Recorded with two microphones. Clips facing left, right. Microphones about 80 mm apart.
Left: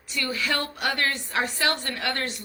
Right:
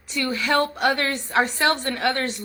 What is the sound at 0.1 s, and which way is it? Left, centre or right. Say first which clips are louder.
A woman's voice: right 5 dB; right.